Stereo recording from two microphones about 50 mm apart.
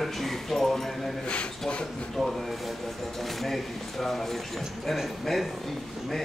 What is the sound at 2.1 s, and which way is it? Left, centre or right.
Speech, centre.